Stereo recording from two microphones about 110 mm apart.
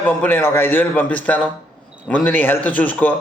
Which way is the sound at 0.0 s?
15° left (ahead or behind).